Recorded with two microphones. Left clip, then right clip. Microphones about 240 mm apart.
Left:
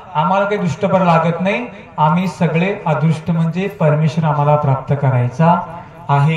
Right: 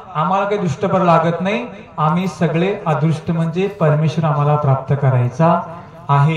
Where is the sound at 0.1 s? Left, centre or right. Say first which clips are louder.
Left 2 dB; left.